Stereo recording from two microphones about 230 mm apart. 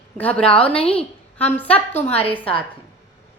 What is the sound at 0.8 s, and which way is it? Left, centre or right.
Speech, left.